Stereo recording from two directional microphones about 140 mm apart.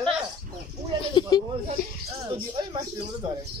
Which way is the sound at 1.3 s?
25° left (ahead or behind).